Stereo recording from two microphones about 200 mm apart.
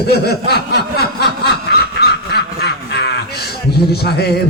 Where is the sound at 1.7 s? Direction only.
55° left (ahead or behind).